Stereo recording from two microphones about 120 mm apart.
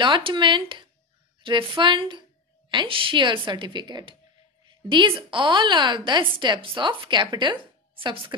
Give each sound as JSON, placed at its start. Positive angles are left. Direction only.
{"t": 0.0, "sound": "a woman's voice", "side_deg": -40}